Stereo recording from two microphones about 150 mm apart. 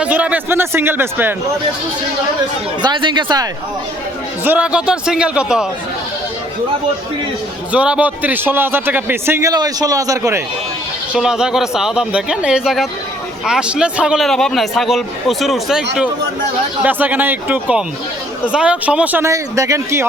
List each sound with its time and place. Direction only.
0.0 s a man's voice: 10° right (ahead or behind)
2.8 s speech: 30° right (ahead or behind)
4.4 s a man's voice: 10° right (ahead or behind)
7.7 s a man's voice: 10° right (ahead or behind)
11.1 s a man's voice: 5° right (ahead or behind); by 20.1 s 20° right (ahead or behind)